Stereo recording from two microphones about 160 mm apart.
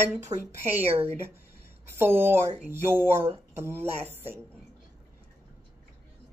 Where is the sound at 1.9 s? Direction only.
15° right (ahead or behind).